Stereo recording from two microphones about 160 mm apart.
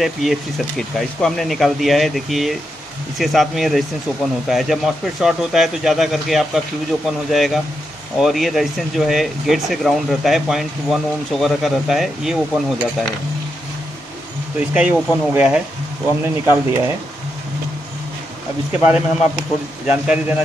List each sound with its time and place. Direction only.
0.0 s speech: centre (ahead or behind)
14.7 s speech: 10° right (ahead or behind)
18.7 s speech: 10° right (ahead or behind)